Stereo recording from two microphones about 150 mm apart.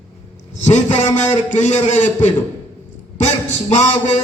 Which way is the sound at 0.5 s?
50° left (ahead or behind).